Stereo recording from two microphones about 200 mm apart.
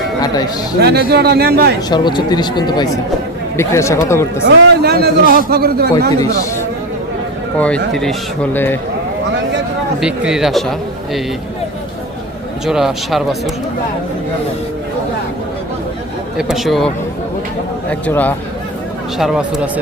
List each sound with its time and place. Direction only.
0.8 s a man's voice: 55° right (ahead or behind)
1.9 s a man's voice: 20° left (ahead or behind)
4.4 s a man's voice: 55° right (ahead or behind)
6.1 s a man's voice: 15° left (ahead or behind)
7.9 s a man's voice: 5° left (ahead or behind)
10.0 s speech: 5° right (ahead or behind)
12.6 s speech: centre (ahead or behind)
16.4 s speech: centre (ahead or behind)
18.0 s a man's voice: 10° left (ahead or behind)
19.2 s speech: centre (ahead or behind)